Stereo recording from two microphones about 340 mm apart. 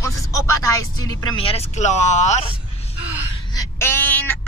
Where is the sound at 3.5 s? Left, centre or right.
Centre.